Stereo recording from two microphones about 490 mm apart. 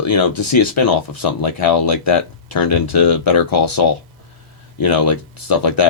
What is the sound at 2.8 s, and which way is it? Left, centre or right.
Speech, left.